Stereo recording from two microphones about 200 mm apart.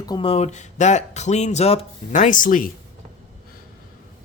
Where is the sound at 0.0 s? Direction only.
25° left (ahead or behind); by 2.7 s 45° left (ahead or behind).